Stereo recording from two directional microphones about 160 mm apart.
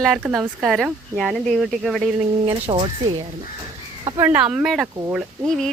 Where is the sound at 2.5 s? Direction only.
30° right (ahead or behind).